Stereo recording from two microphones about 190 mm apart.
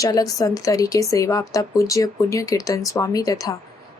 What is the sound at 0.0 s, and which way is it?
A woman's voice, 20° left (ahead or behind).